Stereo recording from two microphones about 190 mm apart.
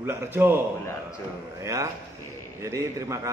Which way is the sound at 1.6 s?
15° right (ahead or behind).